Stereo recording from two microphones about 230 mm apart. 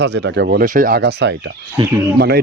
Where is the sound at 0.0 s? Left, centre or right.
Right.